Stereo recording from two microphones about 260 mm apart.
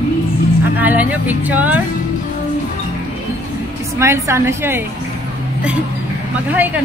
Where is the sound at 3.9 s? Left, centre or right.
Centre.